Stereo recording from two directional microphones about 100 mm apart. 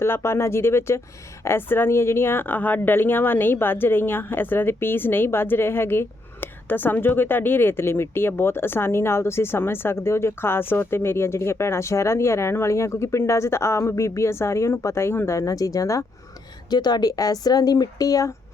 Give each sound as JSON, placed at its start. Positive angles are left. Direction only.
{"t": 0.0, "sound": "a woman's voice", "side_deg": 25}
{"t": 16.6, "sound": "speech", "side_deg": 45}